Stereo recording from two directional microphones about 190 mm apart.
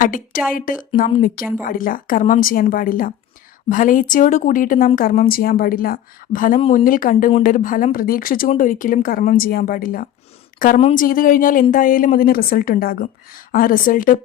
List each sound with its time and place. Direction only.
0.0 s a woman's voice: 45° left (ahead or behind)
10.8 s a woman's voice: 35° left (ahead or behind)
11.0 s a woman's voice: 45° left (ahead or behind)